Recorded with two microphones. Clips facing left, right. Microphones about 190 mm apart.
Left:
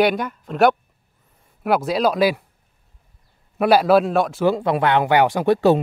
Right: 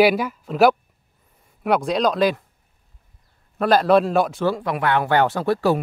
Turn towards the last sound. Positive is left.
turn(degrees=20)  # may be behind; listen again after turning